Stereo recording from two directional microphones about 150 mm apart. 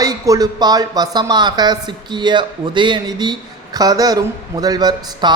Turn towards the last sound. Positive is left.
turn(degrees=-25)  # may be behind; listen again after turning